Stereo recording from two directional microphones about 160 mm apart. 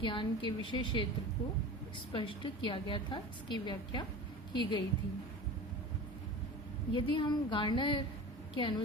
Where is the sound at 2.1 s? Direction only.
30° left (ahead or behind).